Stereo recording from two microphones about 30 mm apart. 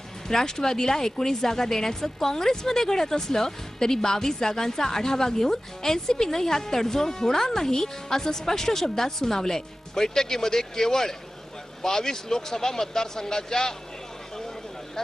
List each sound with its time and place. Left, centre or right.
0.3 s speech: centre